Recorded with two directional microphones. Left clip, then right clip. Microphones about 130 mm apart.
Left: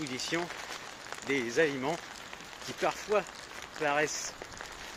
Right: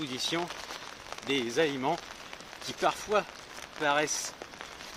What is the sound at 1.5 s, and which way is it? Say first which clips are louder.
Speech: left 1 dB; 20° right (ahead or behind).